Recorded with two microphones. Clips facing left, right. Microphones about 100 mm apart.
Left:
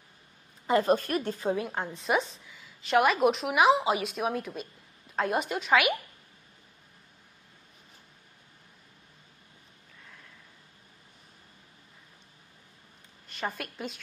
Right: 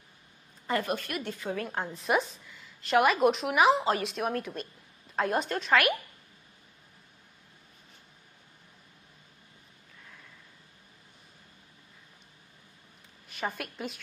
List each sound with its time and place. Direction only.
0.8 s a woman's voice: 35° left (ahead or behind)
1.7 s a woman's voice: centre (ahead or behind)
13.3 s a woman's voice: centre (ahead or behind)